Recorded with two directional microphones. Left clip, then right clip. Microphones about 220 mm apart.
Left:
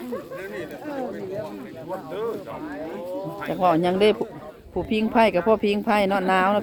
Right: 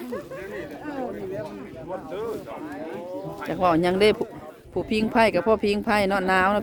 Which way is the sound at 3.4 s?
10° right (ahead or behind).